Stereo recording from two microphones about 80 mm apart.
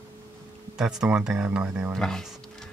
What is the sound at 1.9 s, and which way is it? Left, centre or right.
Speech, centre.